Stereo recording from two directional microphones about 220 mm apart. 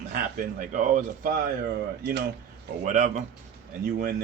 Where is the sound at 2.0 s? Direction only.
50° right (ahead or behind).